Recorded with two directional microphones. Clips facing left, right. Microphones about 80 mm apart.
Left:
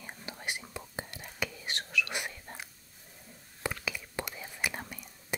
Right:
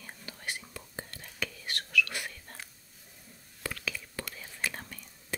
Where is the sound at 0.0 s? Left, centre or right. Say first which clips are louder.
Left 2 dB; left.